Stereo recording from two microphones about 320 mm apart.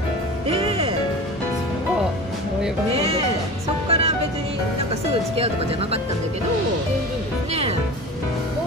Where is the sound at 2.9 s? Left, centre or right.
Centre.